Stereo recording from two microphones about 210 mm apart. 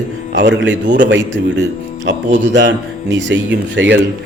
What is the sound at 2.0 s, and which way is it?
Speech, 60° right (ahead or behind).